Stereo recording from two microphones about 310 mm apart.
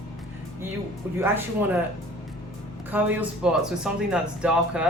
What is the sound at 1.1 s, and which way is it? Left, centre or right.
Speech, centre.